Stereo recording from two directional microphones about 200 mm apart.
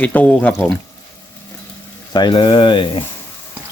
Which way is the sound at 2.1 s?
20° left (ahead or behind).